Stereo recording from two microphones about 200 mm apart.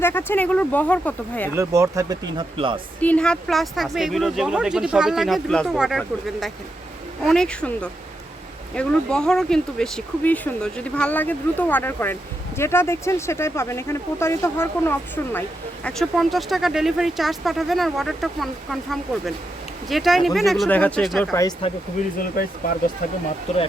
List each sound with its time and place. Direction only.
0.0 s speech: 10° left (ahead or behind)
1.5 s speech: 15° right (ahead or behind)
3.0 s speech: 5° left (ahead or behind)
21.3 s speech: 20° left (ahead or behind)
23.5 s speech: 35° left (ahead or behind)